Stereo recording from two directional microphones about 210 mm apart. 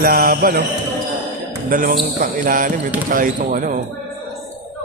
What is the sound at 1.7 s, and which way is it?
Speech, 40° right (ahead or behind).